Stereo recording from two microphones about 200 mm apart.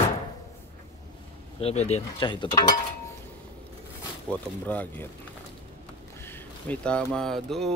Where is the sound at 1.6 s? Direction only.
35° left (ahead or behind).